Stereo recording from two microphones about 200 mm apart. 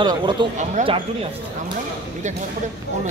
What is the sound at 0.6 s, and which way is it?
Speech, 35° right (ahead or behind).